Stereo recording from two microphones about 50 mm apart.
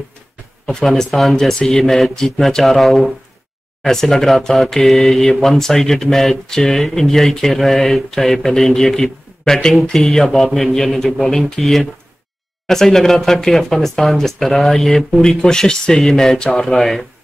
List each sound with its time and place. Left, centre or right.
0.7 s a man's voice: centre